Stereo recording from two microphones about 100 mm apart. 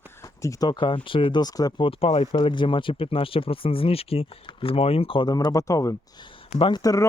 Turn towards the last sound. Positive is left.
turn(degrees=40)  # may be behind; listen again after turning